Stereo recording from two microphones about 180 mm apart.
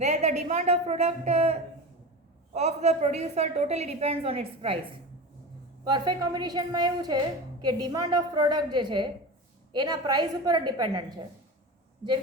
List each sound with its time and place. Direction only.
0.0 s a woman's voice: 40° right (ahead or behind)
5.8 s a woman's voice: 25° right (ahead or behind)